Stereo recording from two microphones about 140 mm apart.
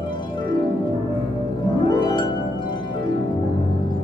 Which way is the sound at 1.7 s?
30° left (ahead or behind).